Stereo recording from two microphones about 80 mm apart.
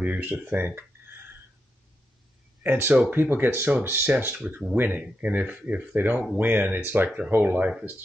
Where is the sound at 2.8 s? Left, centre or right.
Right.